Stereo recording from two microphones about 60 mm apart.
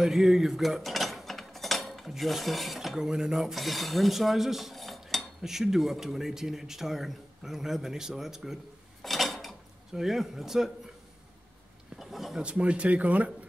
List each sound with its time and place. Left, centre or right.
0.0 s cutlery: centre
9.0 s dishes: centre
12.0 s a sound: centre
12.4 s speech: centre